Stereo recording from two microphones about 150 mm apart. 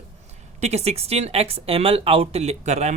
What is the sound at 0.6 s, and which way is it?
Speech, 45° right (ahead or behind).